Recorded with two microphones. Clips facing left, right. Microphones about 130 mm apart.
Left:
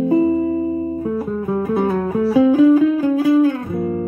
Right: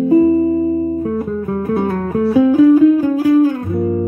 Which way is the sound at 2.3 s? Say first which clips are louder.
Right 1 dB; 25° left (ahead or behind).